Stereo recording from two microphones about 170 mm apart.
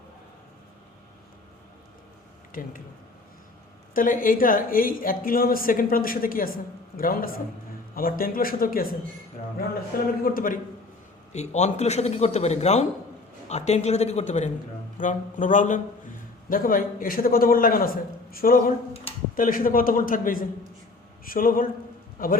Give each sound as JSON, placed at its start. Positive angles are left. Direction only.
{"t": 2.5, "sound": "speech", "side_deg": 55}
{"t": 3.9, "sound": "a woman's voice", "side_deg": 55}
{"t": 11.3, "sound": "a man's voice", "side_deg": 40}
{"t": 19.1, "sound": "a sound", "side_deg": 35}
{"t": 19.4, "sound": "a woman's voice", "side_deg": 55}